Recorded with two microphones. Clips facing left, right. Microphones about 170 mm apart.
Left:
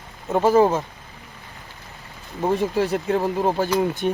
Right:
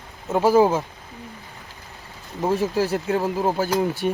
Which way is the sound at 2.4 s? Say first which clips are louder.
Even; 5° right (ahead or behind).